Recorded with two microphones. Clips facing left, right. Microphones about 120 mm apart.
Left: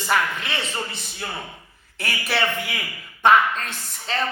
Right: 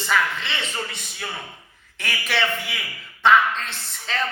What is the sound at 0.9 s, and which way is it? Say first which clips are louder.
A man's voice: left 1 dB; 30° left (ahead or behind).